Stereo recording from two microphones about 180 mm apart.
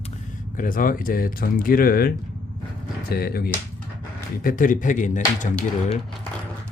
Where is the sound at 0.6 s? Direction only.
50° left (ahead or behind).